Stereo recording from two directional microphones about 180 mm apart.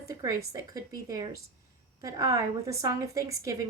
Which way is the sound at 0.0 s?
20° right (ahead or behind).